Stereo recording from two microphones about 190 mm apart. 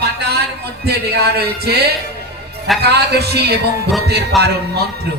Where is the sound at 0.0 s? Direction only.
60° right (ahead or behind).